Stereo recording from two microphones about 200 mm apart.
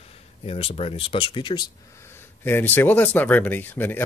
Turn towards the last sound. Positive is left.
turn(degrees=10)  # may be behind; listen again after turning